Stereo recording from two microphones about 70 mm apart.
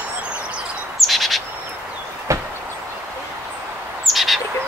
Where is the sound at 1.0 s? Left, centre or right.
Centre.